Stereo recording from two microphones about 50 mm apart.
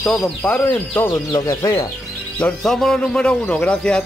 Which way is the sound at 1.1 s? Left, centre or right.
Left.